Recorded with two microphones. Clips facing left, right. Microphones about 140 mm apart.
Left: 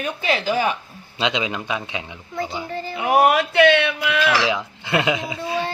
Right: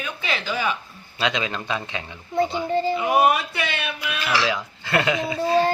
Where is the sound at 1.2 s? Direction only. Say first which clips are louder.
Left 2 dB; 20° left (ahead or behind).